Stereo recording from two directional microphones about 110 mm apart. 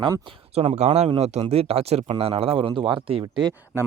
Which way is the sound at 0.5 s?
75° right (ahead or behind).